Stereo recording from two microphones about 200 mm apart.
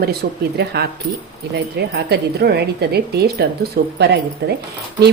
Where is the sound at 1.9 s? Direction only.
55° right (ahead or behind).